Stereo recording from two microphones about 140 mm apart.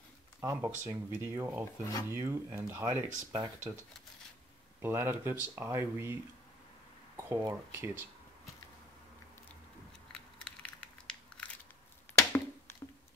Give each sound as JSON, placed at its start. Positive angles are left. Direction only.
{"t": 0.4, "sound": "speech", "side_deg": -15}
{"t": 4.8, "sound": "speech", "side_deg": -15}
{"t": 7.2, "sound": "speech", "side_deg": -20}
{"t": 10.1, "sound": "crushing", "side_deg": 5}
{"t": 12.2, "sound": "a sound", "side_deg": 15}